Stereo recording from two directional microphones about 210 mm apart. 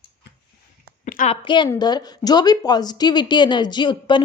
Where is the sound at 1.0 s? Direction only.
35° left (ahead or behind).